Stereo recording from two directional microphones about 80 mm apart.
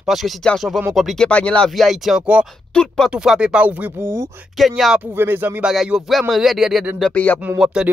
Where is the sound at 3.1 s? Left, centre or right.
Centre; by 4.2 s right.